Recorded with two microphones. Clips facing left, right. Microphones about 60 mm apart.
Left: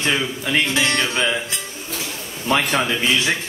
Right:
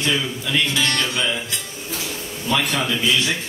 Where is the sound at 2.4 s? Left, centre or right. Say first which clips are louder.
Left 2 dB; left.